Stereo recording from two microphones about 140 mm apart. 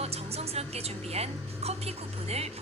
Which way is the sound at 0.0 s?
50° right (ahead or behind).